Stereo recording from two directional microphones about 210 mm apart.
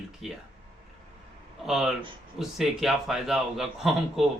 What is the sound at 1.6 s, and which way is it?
Speech, centre (ahead or behind).